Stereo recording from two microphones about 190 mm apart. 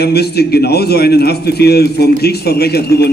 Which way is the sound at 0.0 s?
55° left (ahead or behind).